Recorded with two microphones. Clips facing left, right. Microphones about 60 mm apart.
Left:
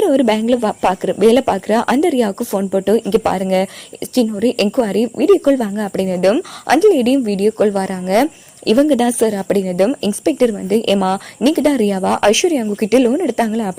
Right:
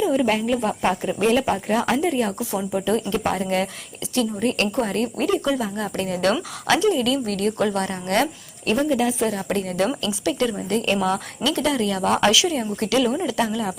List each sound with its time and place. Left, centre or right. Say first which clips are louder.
0.0 s speech: left 7 dB; left
8.6 s speech: left 8 dB; left
9.3 s speech: left 8 dB; left
10.8 s speech: left 4 dB; left
11.4 s speech: left 9 dB; left